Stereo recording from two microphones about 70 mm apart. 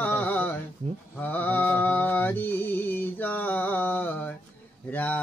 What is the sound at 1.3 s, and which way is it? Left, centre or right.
Music, left.